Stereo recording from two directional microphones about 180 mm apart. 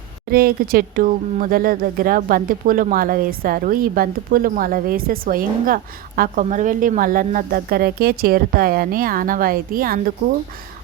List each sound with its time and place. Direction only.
0.3 s speech: 55° right (ahead or behind)